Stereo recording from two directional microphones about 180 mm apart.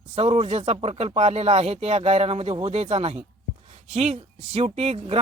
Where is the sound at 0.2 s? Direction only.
35° right (ahead or behind).